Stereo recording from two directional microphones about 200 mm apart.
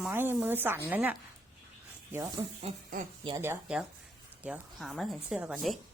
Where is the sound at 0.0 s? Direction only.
10° right (ahead or behind).